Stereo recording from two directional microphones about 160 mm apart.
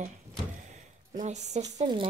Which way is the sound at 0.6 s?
50° right (ahead or behind).